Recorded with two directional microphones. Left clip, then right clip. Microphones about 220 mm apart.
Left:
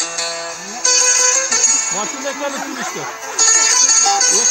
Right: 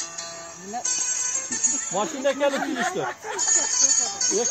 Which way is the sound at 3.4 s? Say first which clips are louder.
Left 9 dB; 40° left (ahead or behind).